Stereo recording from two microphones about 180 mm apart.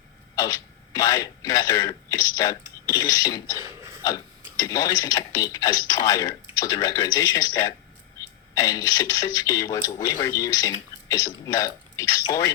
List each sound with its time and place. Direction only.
0.3 s speech: 20° left (ahead or behind)